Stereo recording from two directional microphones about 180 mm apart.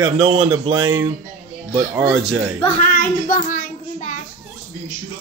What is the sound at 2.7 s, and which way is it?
Child singing, 45° left (ahead or behind).